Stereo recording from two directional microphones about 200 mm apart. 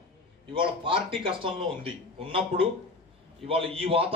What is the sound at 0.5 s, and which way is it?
A man's voice, 25° right (ahead or behind).